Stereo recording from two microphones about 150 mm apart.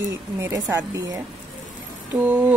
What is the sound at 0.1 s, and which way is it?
A woman's voice, 20° right (ahead or behind).